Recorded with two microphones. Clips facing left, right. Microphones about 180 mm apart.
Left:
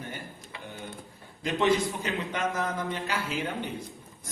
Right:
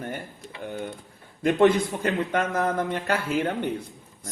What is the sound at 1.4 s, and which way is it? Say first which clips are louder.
A man's voice: right 6 dB; 55° right (ahead or behind).